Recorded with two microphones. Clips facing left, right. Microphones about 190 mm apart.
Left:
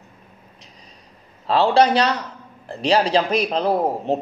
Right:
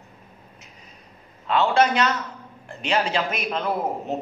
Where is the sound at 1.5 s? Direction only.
35° left (ahead or behind).